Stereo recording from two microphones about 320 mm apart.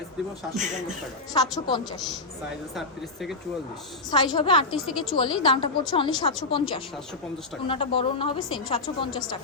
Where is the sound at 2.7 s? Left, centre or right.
Centre.